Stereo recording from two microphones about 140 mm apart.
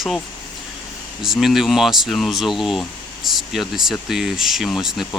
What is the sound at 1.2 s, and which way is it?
Speech, centre (ahead or behind).